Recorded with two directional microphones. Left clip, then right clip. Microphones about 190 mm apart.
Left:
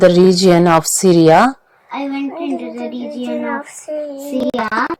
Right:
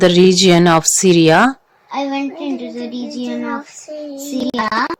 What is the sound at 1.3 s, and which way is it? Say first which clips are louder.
Speech: left 3 dB; 15° right (ahead or behind).